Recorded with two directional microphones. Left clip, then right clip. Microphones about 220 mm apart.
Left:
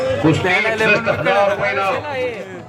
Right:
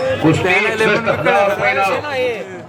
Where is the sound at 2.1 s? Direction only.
45° right (ahead or behind).